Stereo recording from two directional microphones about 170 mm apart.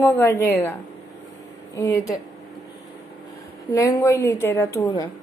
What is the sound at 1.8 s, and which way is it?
Speech, 20° left (ahead or behind).